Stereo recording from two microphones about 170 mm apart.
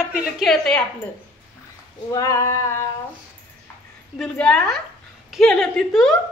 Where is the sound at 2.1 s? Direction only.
20° left (ahead or behind).